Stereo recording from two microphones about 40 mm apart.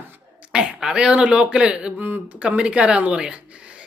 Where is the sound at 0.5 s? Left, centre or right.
Centre.